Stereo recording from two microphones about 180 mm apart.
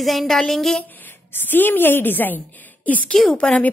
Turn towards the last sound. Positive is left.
turn(degrees=5)  # may be behind; listen again after turning